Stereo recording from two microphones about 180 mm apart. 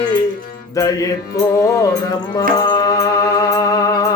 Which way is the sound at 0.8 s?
20° left (ahead or behind).